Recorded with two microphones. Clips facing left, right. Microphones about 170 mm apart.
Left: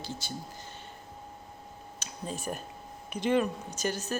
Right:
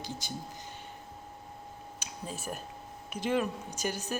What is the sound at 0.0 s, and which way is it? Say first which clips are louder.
Speech: even; 15° right (ahead or behind).